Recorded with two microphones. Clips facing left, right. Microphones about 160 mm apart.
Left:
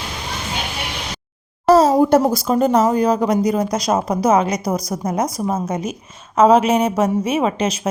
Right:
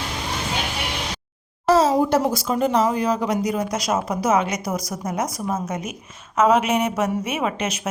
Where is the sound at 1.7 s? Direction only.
40° left (ahead or behind).